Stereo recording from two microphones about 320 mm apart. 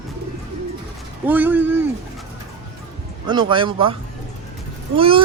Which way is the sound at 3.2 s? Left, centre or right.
Centre.